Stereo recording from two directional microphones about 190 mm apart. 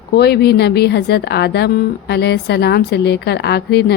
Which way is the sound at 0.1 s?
60° left (ahead or behind).